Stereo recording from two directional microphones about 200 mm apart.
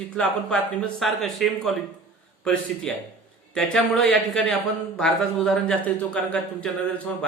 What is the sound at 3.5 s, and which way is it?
A man's voice, centre (ahead or behind).